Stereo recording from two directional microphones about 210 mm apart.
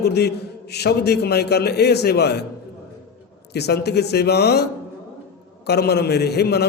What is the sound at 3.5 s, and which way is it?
A man's voice, 50° left (ahead or behind).